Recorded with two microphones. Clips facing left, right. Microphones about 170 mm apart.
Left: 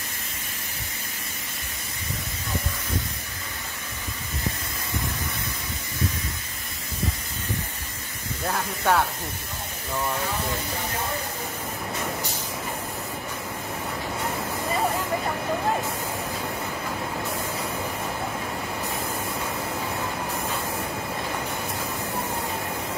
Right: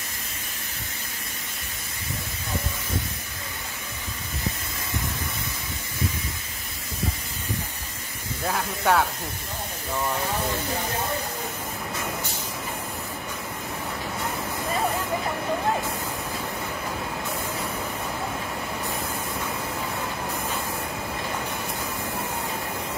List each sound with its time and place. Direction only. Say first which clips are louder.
8.5 s speech: right 1 dB; centre (ahead or behind)